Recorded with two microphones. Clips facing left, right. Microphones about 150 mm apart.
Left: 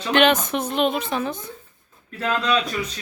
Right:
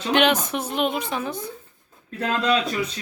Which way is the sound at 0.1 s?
10° right (ahead or behind).